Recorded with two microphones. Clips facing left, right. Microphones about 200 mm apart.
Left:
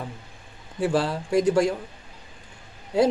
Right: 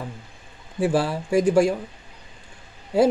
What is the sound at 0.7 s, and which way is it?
Speech, 10° right (ahead or behind).